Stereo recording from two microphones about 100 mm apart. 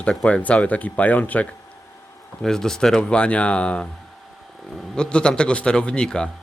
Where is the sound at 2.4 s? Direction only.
5° left (ahead or behind).